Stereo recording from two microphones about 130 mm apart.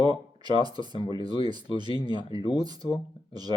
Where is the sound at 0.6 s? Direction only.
35° right (ahead or behind).